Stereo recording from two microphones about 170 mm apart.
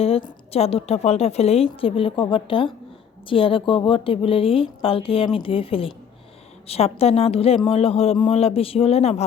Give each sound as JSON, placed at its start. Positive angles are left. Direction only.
{"t": 0.0, "sound": "a woman's voice", "side_deg": 35}